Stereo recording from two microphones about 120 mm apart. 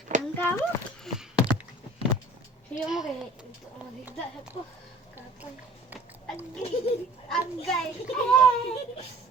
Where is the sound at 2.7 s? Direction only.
5° right (ahead or behind).